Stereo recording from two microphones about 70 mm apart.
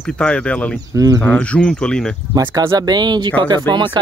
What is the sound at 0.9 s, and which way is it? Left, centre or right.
Speech, right.